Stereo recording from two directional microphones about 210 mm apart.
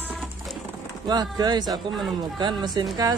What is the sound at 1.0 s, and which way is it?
Speech, 20° right (ahead or behind).